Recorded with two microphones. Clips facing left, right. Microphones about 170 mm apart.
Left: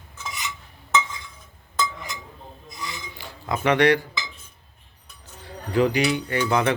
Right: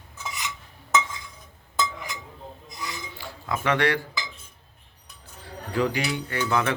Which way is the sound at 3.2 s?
20° left (ahead or behind).